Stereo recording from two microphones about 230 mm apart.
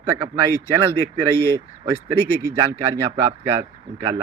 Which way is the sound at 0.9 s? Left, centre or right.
Centre.